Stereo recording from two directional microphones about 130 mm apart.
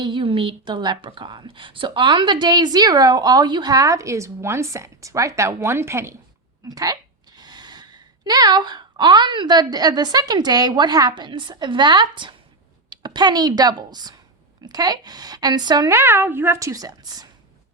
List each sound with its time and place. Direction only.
0.0 s a woman's voice: 40° right (ahead or behind)
16.0 s a woman's voice: 20° right (ahead or behind)